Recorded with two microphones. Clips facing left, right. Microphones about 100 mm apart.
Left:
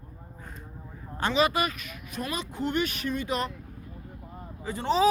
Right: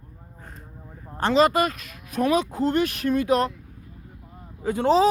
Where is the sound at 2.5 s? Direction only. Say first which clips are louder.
Right 6 dB; 40° right (ahead or behind).